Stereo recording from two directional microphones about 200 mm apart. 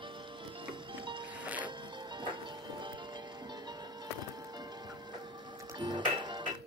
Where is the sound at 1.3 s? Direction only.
5° right (ahead or behind).